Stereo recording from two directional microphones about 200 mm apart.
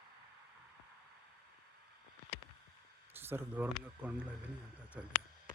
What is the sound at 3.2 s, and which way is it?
Speech, 10° right (ahead or behind).